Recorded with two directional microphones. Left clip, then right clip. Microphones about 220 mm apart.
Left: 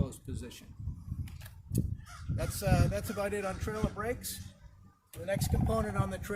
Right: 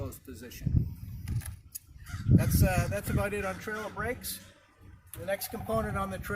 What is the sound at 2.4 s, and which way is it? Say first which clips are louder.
Speech: left 3 dB; centre (ahead or behind).